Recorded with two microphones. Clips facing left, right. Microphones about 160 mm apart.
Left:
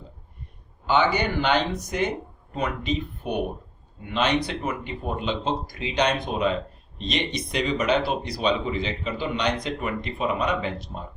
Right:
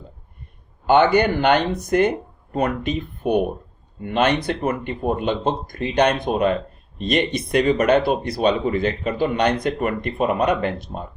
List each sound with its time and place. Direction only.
0.9 s speech: 55° right (ahead or behind)